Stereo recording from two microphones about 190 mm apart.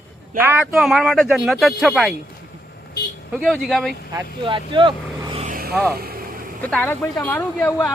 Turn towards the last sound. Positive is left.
turn(degrees=15)  # may be behind; listen again after turning